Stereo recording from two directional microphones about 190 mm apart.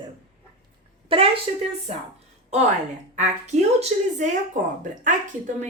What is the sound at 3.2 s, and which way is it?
Speech, 35° right (ahead or behind).